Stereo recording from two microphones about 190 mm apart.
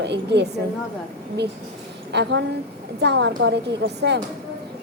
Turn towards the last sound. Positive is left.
turn(degrees=-65)  # may be behind; listen again after turning